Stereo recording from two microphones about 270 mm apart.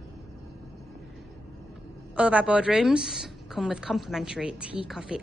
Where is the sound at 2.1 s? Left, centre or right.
Centre.